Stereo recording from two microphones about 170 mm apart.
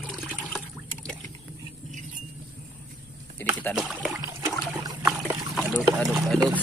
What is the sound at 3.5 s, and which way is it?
Speech, 10° left (ahead or behind).